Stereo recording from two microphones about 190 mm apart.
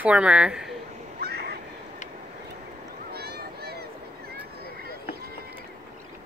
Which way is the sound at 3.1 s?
55° right (ahead or behind).